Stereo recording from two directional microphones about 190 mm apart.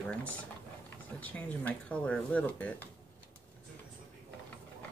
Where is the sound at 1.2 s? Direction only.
10° left (ahead or behind).